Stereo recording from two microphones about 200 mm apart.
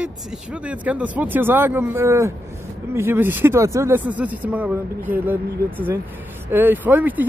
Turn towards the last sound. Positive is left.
turn(degrees=-10)  # may be behind; listen again after turning